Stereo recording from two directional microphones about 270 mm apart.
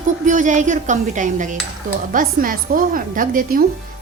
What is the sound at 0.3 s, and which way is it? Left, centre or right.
A woman's voice, right.